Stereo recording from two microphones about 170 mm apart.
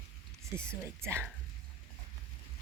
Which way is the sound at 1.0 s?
15° right (ahead or behind).